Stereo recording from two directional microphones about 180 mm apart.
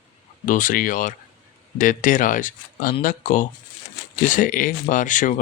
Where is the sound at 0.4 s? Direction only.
50° left (ahead or behind).